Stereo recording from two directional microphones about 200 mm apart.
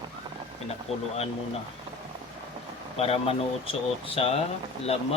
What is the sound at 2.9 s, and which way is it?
Speech, 30° left (ahead or behind).